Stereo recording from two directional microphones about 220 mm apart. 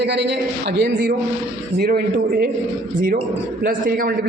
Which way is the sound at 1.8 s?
45° right (ahead or behind).